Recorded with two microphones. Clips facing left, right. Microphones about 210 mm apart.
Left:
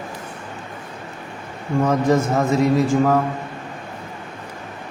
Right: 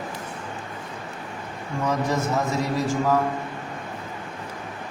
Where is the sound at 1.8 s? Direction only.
50° left (ahead or behind).